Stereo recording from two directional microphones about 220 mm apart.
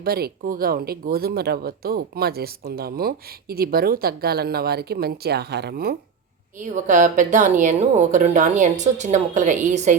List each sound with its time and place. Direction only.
0.0 s a woman's voice: 45° right (ahead or behind)